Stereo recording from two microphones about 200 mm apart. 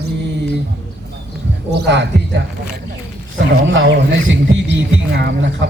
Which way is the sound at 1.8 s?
60° right (ahead or behind).